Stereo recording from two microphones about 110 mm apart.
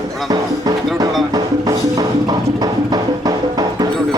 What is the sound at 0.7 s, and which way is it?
Music, 35° right (ahead or behind).